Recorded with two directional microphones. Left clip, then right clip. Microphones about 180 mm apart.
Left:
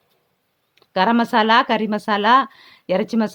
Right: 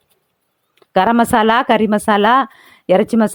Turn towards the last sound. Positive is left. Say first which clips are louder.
# right 7 dB
turn(degrees=-30)  # may be behind; listen again after turning